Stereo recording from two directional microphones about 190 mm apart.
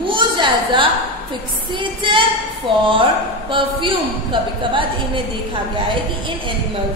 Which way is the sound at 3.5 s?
25° right (ahead or behind).